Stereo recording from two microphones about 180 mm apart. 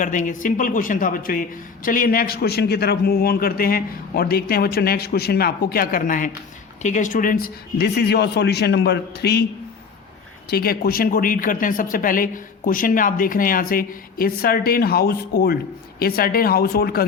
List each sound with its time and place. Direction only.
0.0 s speech: 45° left (ahead or behind); by 9.4 s 65° left (ahead or behind)
10.5 s speech: 60° left (ahead or behind)